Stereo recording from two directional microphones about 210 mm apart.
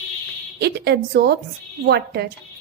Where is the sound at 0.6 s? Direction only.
50° right (ahead or behind).